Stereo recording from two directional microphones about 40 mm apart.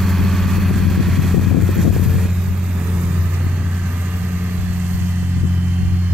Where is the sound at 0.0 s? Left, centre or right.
Centre; by 4.3 s right.